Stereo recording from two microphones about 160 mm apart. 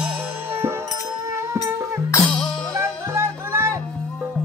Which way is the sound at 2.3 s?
5° left (ahead or behind).